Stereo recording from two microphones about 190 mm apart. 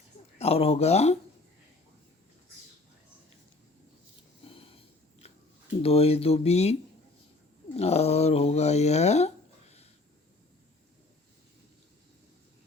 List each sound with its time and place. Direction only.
0.3 s speech: 30° left (ahead or behind)
5.2 s a sound: 35° left (ahead or behind)
5.8 s speech: 30° left (ahead or behind)
7.8 s speech: 35° left (ahead or behind)